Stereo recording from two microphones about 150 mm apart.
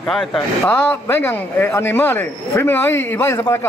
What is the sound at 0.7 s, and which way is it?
Speech, 10° left (ahead or behind).